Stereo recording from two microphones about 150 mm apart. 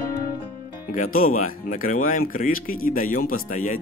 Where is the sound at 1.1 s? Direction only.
65° left (ahead or behind).